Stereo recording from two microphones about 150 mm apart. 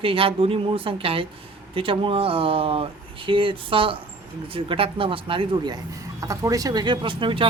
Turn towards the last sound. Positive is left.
turn(degrees=-35)  # may be behind; listen again after turning